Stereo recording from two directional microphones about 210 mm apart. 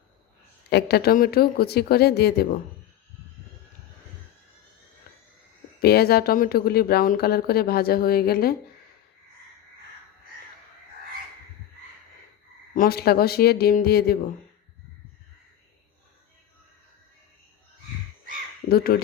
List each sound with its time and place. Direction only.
0.7 s speech: 50° left (ahead or behind)
5.8 s speech: 50° left (ahead or behind)
12.7 s speech: 45° left (ahead or behind)
18.7 s speech: 45° left (ahead or behind)